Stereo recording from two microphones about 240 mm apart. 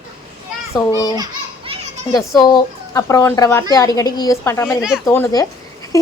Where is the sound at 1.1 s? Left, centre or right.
Centre.